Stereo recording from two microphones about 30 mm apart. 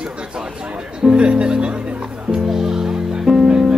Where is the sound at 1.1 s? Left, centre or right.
Right.